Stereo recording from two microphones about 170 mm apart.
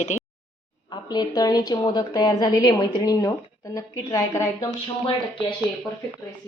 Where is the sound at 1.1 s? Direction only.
25° left (ahead or behind).